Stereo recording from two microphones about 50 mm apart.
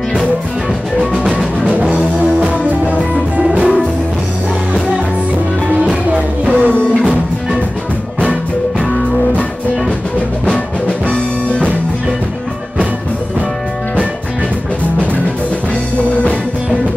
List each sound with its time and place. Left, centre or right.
1.1 s music: right
6.1 s music: right
10.4 s music: left